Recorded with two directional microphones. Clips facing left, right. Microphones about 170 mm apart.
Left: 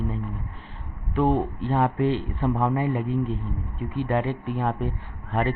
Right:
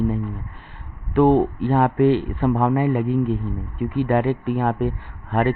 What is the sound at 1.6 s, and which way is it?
A man's voice, 60° right (ahead or behind).